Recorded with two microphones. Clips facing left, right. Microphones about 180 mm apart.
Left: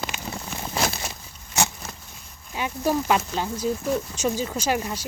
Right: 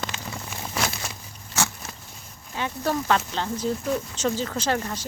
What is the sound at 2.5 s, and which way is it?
Speech, 10° left (ahead or behind).